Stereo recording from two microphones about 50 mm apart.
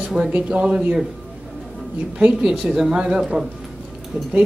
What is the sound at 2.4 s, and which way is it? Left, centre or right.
Speech, centre.